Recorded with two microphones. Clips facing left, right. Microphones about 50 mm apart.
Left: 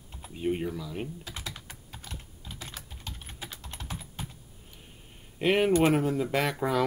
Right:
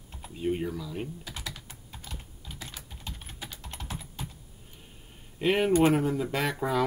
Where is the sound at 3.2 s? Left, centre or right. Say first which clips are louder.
Even; left.